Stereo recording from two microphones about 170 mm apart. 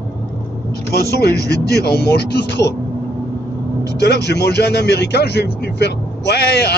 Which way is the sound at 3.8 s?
80° left.